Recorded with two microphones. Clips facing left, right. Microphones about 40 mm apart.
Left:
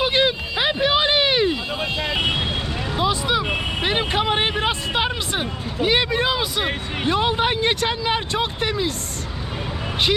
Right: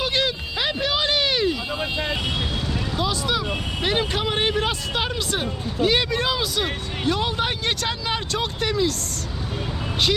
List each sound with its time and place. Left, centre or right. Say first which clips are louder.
0.0 s a sound: left 4 dB; left
2.1 s vehicle: left 5 dB; left
2.9 s vehicle: left 4 dB; left
3.8 s speech: left 1 dB; left